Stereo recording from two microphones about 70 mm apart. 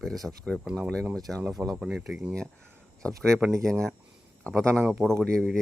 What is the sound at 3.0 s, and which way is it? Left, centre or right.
Speech, centre.